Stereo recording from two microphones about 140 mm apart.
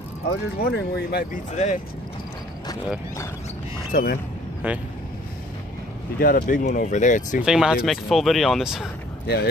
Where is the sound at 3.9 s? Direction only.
90° left.